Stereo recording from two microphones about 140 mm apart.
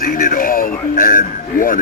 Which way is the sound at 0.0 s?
90° left.